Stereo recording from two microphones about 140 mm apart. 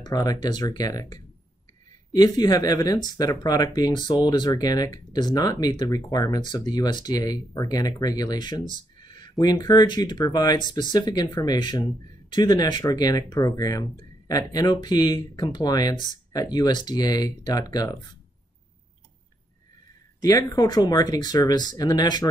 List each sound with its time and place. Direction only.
0.0 s speech: 25° left (ahead or behind)
20.2 s speech: 25° left (ahead or behind)